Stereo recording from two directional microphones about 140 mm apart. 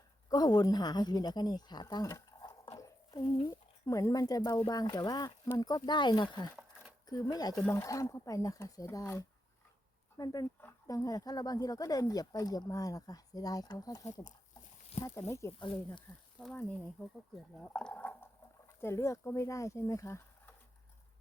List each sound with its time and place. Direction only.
0.3 s speech: 30° left (ahead or behind)
2.7 s a sound: 25° left (ahead or behind)
3.8 s speech: 25° left (ahead or behind)
16.4 s speech: 5° left (ahead or behind)